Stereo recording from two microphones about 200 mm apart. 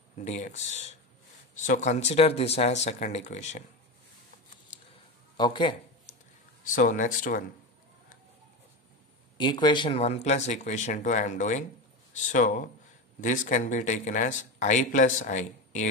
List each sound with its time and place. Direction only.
0.2 s speech: 35° left (ahead or behind)
5.4 s speech: 25° left (ahead or behind)
6.6 s speech: 40° left (ahead or behind)
9.4 s speech: 25° left (ahead or behind); by 15.9 s 40° left (ahead or behind)